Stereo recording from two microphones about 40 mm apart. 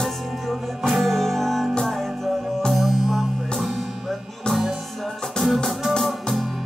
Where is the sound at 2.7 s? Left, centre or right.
Centre.